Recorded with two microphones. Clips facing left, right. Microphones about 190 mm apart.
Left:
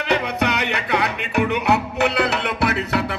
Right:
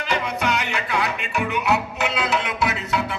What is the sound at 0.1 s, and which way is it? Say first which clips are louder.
Music: left 3 dB; 65° left (ahead or behind).